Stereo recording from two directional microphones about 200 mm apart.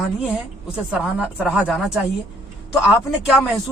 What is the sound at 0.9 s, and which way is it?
A woman's voice, 5° right (ahead or behind).